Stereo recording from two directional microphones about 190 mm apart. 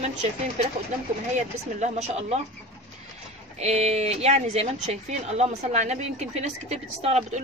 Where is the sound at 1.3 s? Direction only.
35° right (ahead or behind).